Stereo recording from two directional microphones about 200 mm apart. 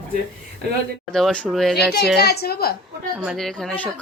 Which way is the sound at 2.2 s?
55° left (ahead or behind).